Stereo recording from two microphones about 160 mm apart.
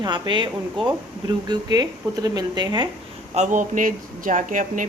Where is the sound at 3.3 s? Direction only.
50° right (ahead or behind).